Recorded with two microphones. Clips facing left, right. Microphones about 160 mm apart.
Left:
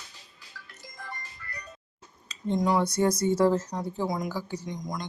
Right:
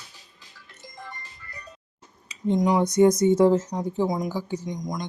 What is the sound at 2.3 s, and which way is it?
Speech, 15° right (ahead or behind).